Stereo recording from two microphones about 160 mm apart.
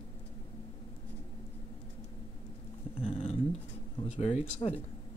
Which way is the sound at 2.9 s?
40° left (ahead or behind).